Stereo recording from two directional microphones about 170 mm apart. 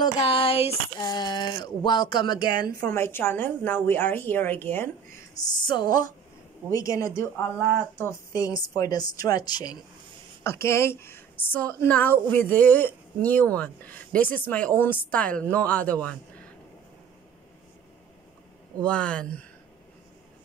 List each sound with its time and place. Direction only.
0.0 s a sound: 35° left (ahead or behind)
1.0 s a woman's voice: 25° left (ahead or behind)
2.6 s a woman's voice: 15° left (ahead or behind)
5.6 s a woman's voice: 25° left (ahead or behind)
5.9 s a woman's voice: 55° right (ahead or behind)
6.7 s a woman's voice: 20° left (ahead or behind)
18.8 s a woman's voice: 5° left (ahead or behind)